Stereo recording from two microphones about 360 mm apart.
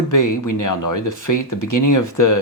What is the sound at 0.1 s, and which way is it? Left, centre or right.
Speech, left.